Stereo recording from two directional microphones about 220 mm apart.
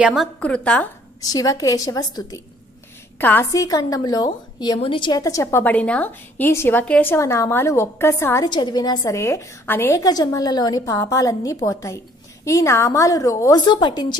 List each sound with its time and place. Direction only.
0.0 s a woman's voice: centre (ahead or behind)
1.2 s a woman's voice: 15° left (ahead or behind)